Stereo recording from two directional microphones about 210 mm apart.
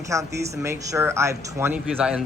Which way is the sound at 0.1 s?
15° right (ahead or behind).